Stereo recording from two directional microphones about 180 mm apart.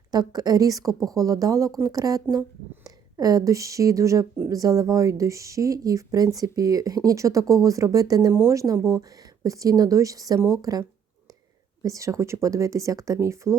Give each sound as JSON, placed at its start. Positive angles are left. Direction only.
{"t": 0.1, "sound": "speech", "side_deg": -20}